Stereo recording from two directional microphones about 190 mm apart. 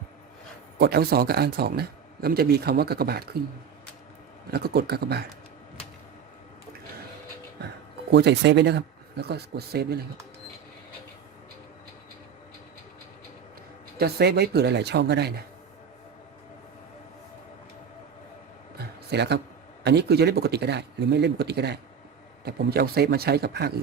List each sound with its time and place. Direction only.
0.8 s speech: 55° right (ahead or behind)
4.5 s speech: 55° right (ahead or behind)
8.1 s speech: 60° right (ahead or behind)
14.0 s speech: 60° right (ahead or behind)
18.8 s a sound: 60° right (ahead or behind)
19.8 s speech: 60° right (ahead or behind)